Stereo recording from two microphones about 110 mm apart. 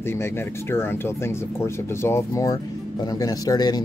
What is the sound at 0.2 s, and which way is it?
Speech, 20° left (ahead or behind).